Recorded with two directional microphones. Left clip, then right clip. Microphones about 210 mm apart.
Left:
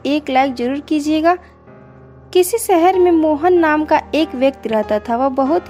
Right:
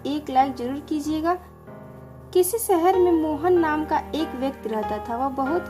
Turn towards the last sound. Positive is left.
turn(degrees=30)  # may be behind; listen again after turning